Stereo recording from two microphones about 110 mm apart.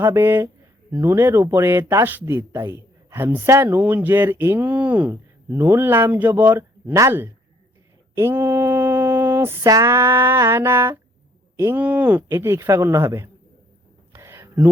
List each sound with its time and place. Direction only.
0.0 s speech: 20° right (ahead or behind)
8.1 s mantra: 20° right (ahead or behind)
9.6 s speech: 30° right (ahead or behind)
11.8 s speech: 15° right (ahead or behind)
14.1 s a sound: 25° right (ahead or behind)